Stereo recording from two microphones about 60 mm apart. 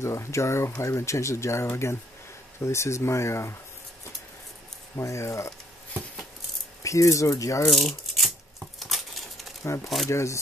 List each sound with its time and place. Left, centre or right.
0.0 s speech: left
4.9 s speech: left
6.8 s speech: left
7.7 s a sound: centre
10.0 s speech: left